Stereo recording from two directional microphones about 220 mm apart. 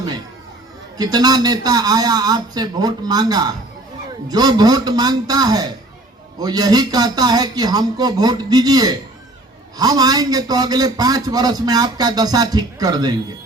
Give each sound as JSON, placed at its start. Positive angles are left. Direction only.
{"t": 0.9, "sound": "a man's voice", "side_deg": -20}